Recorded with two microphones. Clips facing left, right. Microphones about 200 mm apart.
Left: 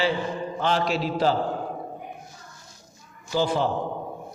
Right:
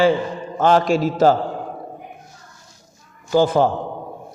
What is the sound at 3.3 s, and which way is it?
Speech, 50° right (ahead or behind).